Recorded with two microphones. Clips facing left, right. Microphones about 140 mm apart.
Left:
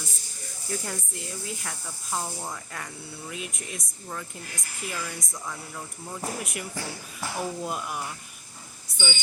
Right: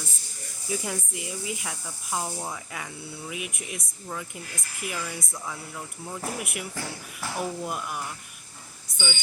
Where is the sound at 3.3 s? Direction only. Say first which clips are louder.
Even; 65° right (ahead or behind).